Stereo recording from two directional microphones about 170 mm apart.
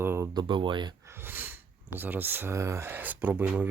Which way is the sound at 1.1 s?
15° right (ahead or behind).